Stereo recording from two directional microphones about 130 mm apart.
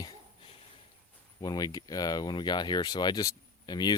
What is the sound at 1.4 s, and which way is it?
Speech, 30° left (ahead or behind).